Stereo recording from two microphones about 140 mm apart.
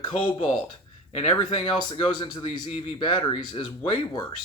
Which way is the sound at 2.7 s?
45° left (ahead or behind).